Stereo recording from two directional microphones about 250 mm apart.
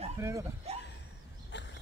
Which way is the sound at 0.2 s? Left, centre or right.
Centre.